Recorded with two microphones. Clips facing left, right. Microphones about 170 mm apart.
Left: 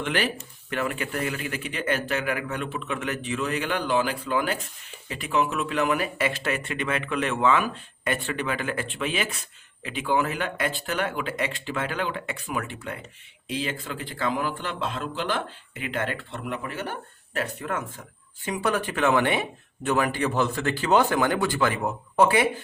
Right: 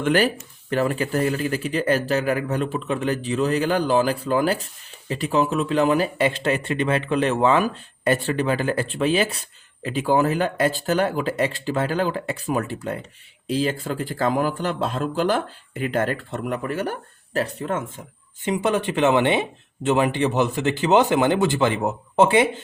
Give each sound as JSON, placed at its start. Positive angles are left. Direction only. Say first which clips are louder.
{"t": 0.0, "sound": "speech", "louder": "right 7 dB", "side_deg": -40}